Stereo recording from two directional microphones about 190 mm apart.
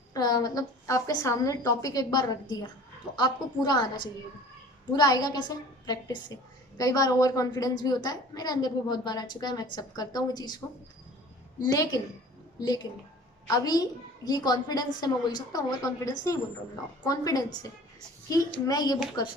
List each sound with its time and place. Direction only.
0.1 s a woman's voice: 20° left (ahead or behind)
4.9 s a woman's voice: 20° left (ahead or behind)
11.7 s a woman's voice: 20° left (ahead or behind)